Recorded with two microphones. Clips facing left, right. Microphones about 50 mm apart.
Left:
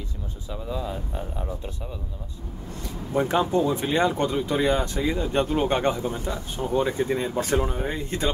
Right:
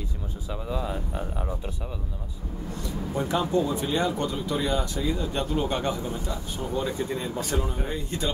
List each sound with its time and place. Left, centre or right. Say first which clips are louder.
0.5 s speech: even; centre
3.2 s speech: left 3 dB; left